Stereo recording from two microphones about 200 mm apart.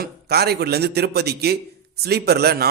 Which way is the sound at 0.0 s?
55° right (ahead or behind).